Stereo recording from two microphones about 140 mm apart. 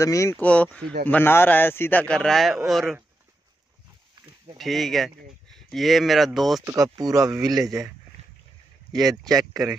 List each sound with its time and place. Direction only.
0.0 s speech: 20° left (ahead or behind)
0.4 s speech: 10° left (ahead or behind)
4.6 s speech: centre (ahead or behind)
6.6 s speech: 25° right (ahead or behind)
9.1 s speech: 25° right (ahead or behind)